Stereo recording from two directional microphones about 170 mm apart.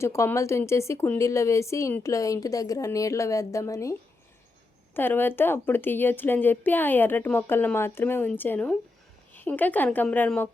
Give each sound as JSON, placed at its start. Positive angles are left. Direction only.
{"t": 0.0, "sound": "speech", "side_deg": 15}
{"t": 4.9, "sound": "speech", "side_deg": 10}